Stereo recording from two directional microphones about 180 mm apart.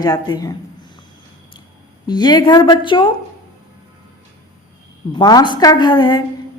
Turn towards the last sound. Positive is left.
turn(degrees=25)  # may be behind; listen again after turning